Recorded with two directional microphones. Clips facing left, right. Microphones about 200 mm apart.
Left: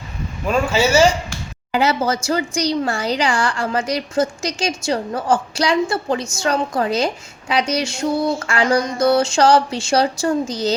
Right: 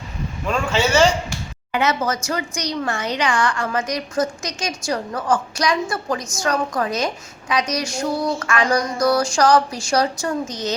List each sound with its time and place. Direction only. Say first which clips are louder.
0.4 s a man's voice: left 3 dB; 10° left (ahead or behind)
1.7 s a woman's voice: left 3 dB; 30° left (ahead or behind)